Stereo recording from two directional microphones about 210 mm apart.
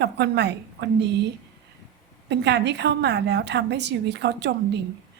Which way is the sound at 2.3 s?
55° right (ahead or behind).